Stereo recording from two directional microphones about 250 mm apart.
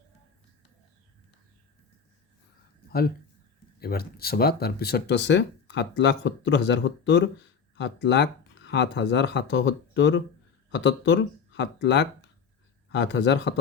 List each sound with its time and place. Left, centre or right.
3.8 s speech: left